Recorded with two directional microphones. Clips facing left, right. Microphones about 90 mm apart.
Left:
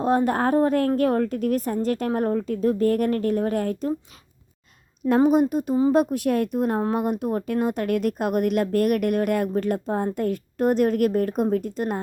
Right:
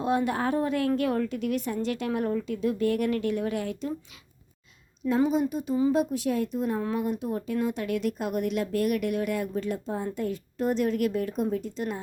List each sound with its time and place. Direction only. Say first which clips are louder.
0.0 s a woman's voice: left 5 dB; 40° left (ahead or behind)
5.0 s a woman's voice: left 6 dB; 60° left (ahead or behind)